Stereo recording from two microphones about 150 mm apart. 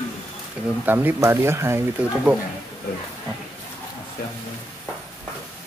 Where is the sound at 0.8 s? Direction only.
15° right (ahead or behind).